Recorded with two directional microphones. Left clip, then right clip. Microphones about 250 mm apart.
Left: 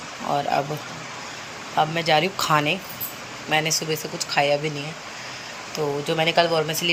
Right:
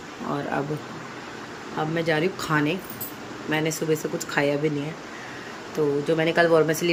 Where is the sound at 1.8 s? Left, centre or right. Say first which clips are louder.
Left 4 dB; centre.